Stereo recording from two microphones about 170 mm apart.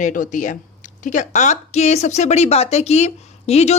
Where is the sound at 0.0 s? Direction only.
50° left (ahead or behind).